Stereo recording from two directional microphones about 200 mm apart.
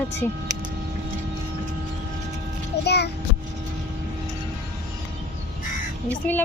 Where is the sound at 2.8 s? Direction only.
55° left (ahead or behind).